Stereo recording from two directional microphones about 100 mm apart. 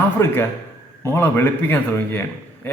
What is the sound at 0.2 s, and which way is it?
A man's voice, 30° left (ahead or behind).